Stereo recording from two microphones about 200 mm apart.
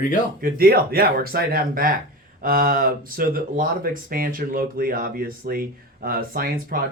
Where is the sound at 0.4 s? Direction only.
50° right (ahead or behind).